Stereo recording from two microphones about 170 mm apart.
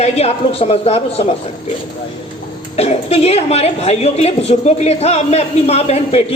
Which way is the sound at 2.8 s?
35° left (ahead or behind).